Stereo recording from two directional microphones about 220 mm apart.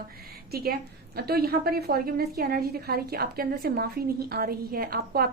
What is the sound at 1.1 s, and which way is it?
A woman's voice, 45° right (ahead or behind).